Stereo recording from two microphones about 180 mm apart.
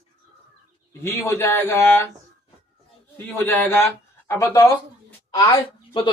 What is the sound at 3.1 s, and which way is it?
Speech, 10° left (ahead or behind).